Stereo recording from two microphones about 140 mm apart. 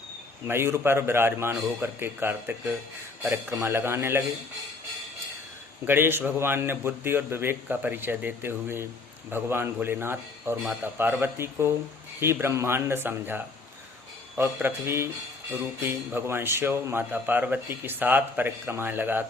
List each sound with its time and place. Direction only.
0.4 s speech: 15° right (ahead or behind)
5.8 s speech: 15° right (ahead or behind)